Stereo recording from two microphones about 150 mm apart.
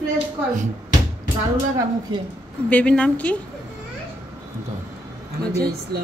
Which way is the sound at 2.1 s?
35° right (ahead or behind).